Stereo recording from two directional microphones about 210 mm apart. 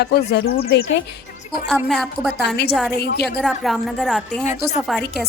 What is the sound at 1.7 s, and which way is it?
Speech, centre (ahead or behind).